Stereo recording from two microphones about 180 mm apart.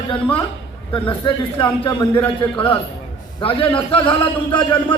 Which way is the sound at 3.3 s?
30° left (ahead or behind).